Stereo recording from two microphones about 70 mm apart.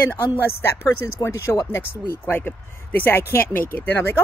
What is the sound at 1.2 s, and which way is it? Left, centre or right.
Speech, left.